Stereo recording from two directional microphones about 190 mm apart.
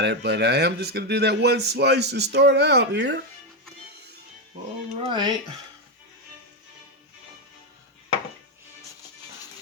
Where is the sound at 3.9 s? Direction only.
60° right (ahead or behind).